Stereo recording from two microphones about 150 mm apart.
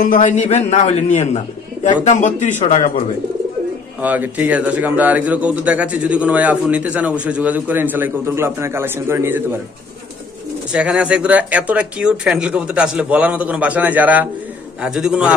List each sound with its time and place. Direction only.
0.0 s speech: 60° left (ahead or behind)
4.0 s a man's voice: 10° right (ahead or behind)
10.7 s a man's voice: 5° right (ahead or behind)